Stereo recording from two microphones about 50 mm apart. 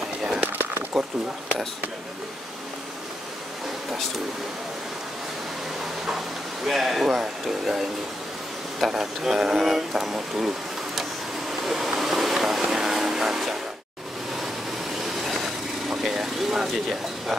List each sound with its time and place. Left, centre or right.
0.2 s a sound: centre
1.0 s speech: centre
6.6 s speech: centre
11.6 s vehicle: centre
15.0 s vehicle: centre